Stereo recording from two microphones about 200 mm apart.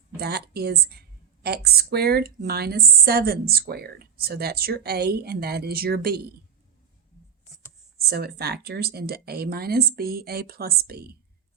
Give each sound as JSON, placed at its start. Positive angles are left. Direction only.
{"t": 0.2, "sound": "a woman's voice", "side_deg": -55}
{"t": 8.0, "sound": "a woman's voice", "side_deg": -50}